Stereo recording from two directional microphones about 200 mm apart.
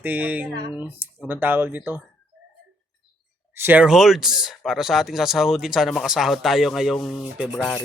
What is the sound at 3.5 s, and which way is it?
Speech, 10° right (ahead or behind).